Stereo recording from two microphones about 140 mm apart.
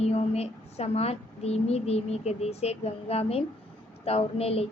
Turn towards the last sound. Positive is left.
turn(degrees=45)  # may be behind; listen again after turning